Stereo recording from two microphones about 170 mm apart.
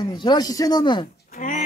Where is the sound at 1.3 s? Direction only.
50° left (ahead or behind).